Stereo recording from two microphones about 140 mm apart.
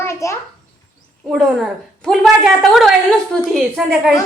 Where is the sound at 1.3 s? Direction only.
Centre (ahead or behind).